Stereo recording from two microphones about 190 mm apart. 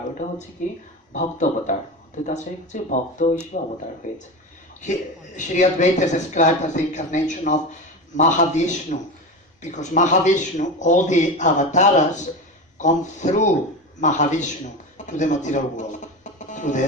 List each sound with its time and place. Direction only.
0.2 s speech: 40° left (ahead or behind)
5.4 s a man's voice: 40° left (ahead or behind)